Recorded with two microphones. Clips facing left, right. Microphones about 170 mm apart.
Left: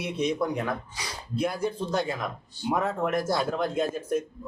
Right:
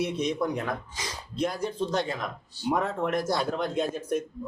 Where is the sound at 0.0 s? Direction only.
10° left (ahead or behind).